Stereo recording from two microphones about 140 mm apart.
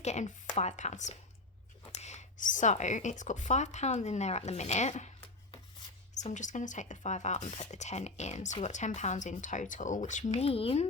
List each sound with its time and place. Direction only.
0.0 s a woman's voice: 55° left (ahead or behind)
6.2 s a woman's voice: 60° left (ahead or behind); by 10.8 s 45° left (ahead or behind)